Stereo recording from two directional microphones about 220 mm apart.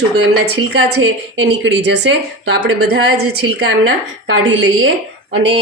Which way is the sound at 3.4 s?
60° right (ahead or behind).